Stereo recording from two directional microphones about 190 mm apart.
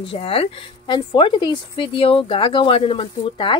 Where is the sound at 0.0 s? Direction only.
30° left (ahead or behind).